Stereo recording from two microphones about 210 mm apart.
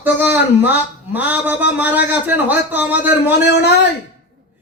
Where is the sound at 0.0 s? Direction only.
10° right (ahead or behind).